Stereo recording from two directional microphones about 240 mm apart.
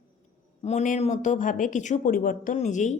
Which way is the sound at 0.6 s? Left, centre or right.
Left.